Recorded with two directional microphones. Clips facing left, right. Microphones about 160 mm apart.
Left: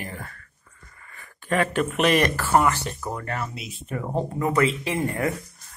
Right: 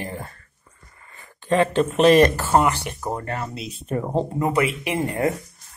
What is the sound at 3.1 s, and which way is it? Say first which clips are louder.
Speech: right 4 dB; 30° right (ahead or behind).